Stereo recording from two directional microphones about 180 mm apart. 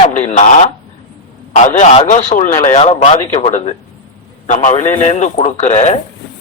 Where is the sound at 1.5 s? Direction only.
40° left (ahead or behind).